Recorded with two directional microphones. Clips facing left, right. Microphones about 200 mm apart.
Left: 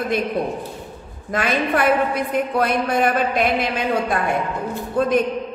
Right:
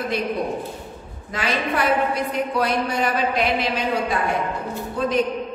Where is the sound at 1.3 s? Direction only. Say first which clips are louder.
Left 4 dB; 50° left (ahead or behind).